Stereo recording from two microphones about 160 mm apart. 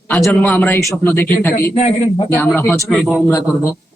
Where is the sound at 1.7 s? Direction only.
40° left (ahead or behind).